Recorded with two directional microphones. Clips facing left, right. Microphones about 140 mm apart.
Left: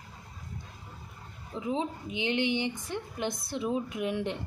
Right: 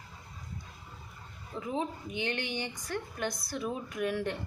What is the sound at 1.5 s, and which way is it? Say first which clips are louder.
A woman's voice: left 2 dB; 15° left (ahead or behind).